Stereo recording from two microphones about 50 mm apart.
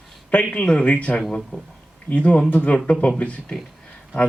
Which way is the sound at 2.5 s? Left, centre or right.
Left.